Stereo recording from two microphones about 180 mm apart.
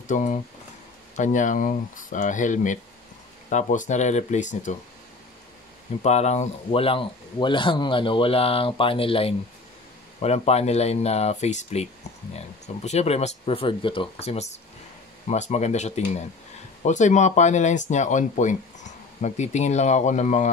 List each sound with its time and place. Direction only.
0.1 s speech: 45° left (ahead or behind)
6.0 s speech: 40° left (ahead or behind)